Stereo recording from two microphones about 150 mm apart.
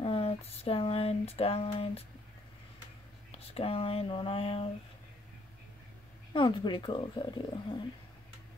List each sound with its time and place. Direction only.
0.0 s a sound: 40° left (ahead or behind)
3.3 s speech: 40° left (ahead or behind)
6.3 s speech: 30° left (ahead or behind)